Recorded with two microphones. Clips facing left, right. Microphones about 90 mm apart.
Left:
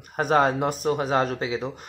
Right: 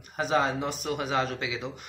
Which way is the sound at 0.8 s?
40° left (ahead or behind).